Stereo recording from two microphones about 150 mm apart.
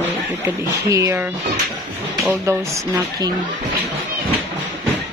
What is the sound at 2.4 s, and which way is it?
Speech, 20° right (ahead or behind).